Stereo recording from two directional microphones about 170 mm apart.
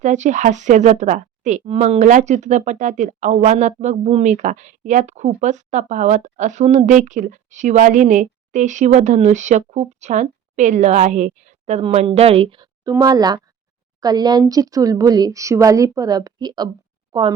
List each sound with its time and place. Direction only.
0.0 s speech: 45° right (ahead or behind); by 17.3 s 30° right (ahead or behind)